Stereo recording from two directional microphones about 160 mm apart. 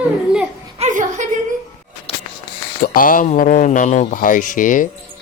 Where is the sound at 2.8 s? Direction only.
60° left (ahead or behind).